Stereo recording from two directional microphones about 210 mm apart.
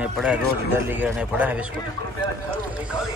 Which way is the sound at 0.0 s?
5° right (ahead or behind).